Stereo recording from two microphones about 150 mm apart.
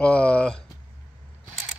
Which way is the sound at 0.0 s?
10° left (ahead or behind).